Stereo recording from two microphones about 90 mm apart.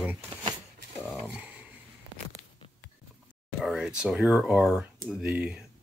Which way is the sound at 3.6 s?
5° right (ahead or behind).